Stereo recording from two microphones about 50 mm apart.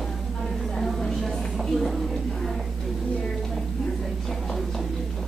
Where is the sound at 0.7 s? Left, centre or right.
Centre.